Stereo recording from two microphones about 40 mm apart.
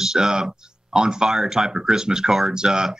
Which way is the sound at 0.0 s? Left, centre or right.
Centre.